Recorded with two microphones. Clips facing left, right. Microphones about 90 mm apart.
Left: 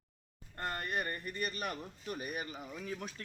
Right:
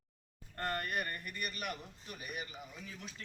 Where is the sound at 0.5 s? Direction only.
20° left (ahead or behind); by 3.1 s 45° left (ahead or behind).